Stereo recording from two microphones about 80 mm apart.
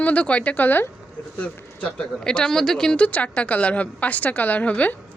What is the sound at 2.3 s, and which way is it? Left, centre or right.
A woman's voice, centre.